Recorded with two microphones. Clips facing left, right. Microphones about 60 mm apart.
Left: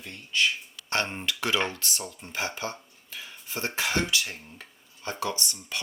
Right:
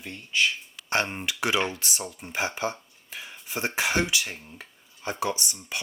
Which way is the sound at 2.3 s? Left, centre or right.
Right.